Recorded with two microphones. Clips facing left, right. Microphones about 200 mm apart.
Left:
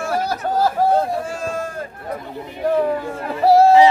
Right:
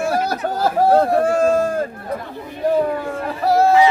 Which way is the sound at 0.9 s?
65° right (ahead or behind).